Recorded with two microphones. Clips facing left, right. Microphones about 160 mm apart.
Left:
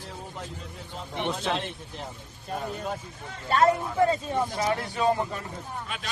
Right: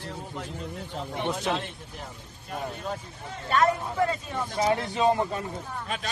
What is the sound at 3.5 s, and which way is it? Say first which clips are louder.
Speech: left 2 dB; 30° left (ahead or behind).